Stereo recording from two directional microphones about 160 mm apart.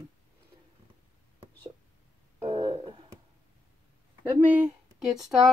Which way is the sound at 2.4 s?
35° right (ahead or behind).